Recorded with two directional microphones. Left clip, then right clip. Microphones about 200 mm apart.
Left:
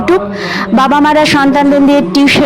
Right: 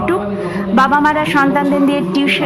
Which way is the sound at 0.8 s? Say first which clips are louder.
Left 4 dB; 35° left (ahead or behind).